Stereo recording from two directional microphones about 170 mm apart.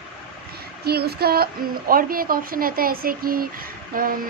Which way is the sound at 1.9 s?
60° right (ahead or behind).